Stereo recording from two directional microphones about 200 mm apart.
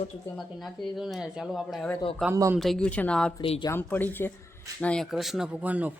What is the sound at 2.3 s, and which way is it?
Speech, 15° right (ahead or behind).